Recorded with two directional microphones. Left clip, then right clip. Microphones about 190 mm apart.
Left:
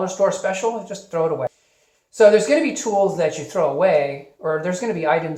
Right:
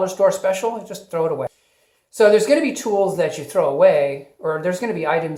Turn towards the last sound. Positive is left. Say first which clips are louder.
# even
turn(degrees=-35)  # may be behind; listen again after turning